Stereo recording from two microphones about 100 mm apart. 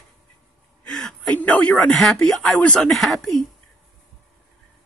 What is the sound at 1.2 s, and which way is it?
Speech, 15° left (ahead or behind).